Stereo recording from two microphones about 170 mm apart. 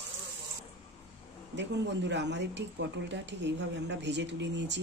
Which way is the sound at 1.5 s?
90° right.